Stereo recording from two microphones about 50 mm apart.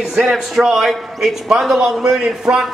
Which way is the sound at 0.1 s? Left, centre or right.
Centre.